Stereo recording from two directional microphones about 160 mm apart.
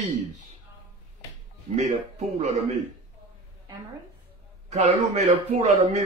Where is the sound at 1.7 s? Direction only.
45° right (ahead or behind).